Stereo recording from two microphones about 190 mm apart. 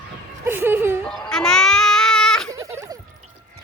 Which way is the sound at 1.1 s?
5° left (ahead or behind).